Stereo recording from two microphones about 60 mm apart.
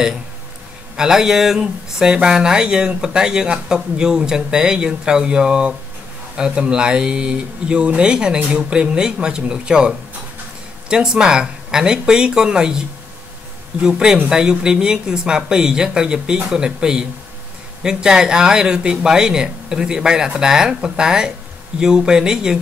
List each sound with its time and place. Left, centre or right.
0.9 s speech: centre
13.8 s speech: centre